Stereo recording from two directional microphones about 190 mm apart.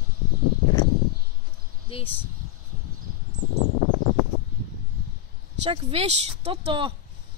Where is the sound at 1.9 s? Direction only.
30° left (ahead or behind).